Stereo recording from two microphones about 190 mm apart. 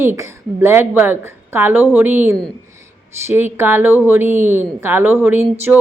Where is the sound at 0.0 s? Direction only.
15° right (ahead or behind).